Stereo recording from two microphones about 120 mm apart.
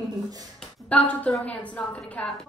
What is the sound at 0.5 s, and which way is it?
A woman's voice, 10° left (ahead or behind).